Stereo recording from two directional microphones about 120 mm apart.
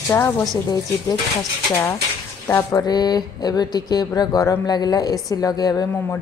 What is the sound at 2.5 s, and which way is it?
A woman's voice, 30° left (ahead or behind).